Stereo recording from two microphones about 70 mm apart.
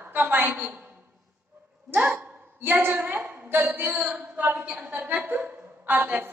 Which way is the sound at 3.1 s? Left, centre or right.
Right.